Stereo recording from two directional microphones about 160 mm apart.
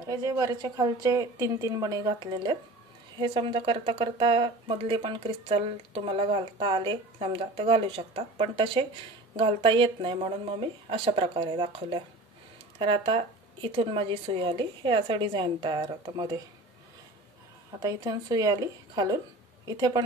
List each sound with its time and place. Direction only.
0.0 s a woman's voice: 20° right (ahead or behind)
17.8 s a woman's voice: 25° right (ahead or behind)